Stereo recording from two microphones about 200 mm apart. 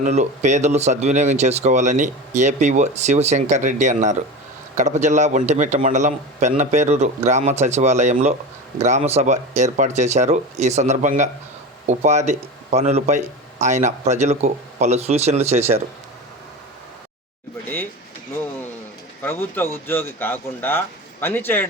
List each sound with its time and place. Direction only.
0.0 s speech: 35° right (ahead or behind)
19.2 s speech: 10° left (ahead or behind)